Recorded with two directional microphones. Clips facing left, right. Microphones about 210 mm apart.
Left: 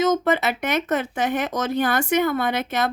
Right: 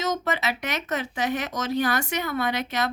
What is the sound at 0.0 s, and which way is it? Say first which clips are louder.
Speech: left 7 dB; 50° left (ahead or behind).